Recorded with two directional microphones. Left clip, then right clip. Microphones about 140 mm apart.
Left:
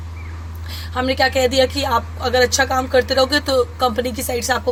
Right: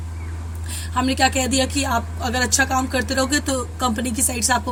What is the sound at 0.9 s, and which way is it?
Speech, 35° left (ahead or behind).